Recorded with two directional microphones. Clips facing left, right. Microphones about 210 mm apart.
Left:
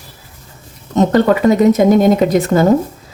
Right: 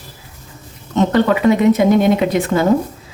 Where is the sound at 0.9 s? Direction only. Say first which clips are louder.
Left 3 dB; 40° left (ahead or behind).